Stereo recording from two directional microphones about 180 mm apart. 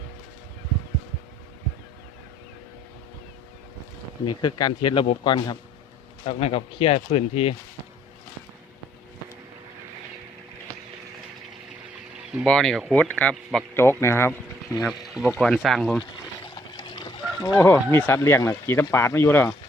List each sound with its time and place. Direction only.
4.4 s speech: 25° left (ahead or behind)
12.5 s speech: 5° left (ahead or behind)
15.4 s speech: centre (ahead or behind)
16.6 s speech: 25° left (ahead or behind)